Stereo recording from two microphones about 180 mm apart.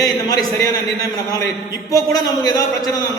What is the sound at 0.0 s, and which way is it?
Speech, 20° left (ahead or behind).